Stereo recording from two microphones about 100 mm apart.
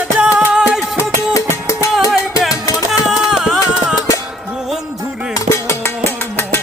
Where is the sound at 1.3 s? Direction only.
30° left (ahead or behind).